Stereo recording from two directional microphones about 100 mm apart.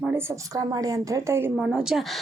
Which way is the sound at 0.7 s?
35° right (ahead or behind).